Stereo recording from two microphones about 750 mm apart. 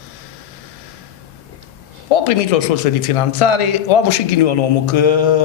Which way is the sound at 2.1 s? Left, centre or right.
Left.